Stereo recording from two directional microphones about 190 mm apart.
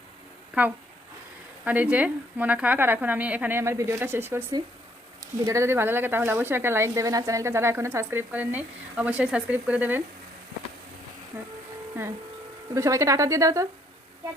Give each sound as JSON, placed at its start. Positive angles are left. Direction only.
{"t": 1.6, "sound": "speech", "side_deg": -10}
{"t": 12.7, "sound": "speech", "side_deg": -15}